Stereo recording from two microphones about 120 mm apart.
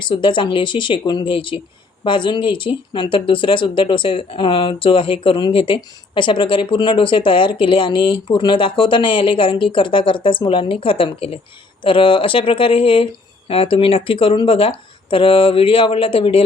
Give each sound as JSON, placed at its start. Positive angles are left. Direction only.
{"t": 0.0, "sound": "speech", "side_deg": 40}